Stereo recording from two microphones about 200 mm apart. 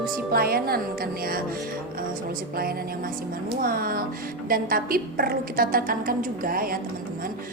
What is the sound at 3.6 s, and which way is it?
A woman's voice, 45° right (ahead or behind).